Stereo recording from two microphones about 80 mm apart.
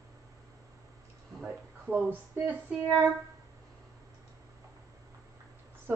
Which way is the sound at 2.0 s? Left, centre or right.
Right.